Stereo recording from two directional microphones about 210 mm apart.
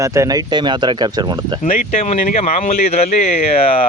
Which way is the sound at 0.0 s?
15° right (ahead or behind).